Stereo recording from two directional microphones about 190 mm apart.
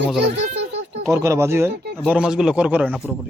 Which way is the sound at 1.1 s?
15° right (ahead or behind).